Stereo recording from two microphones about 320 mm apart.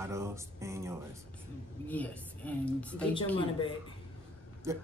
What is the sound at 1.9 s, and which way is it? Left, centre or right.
A woman's voice, centre.